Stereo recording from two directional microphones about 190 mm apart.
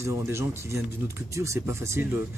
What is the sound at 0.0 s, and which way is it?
Speech, 15° right (ahead or behind).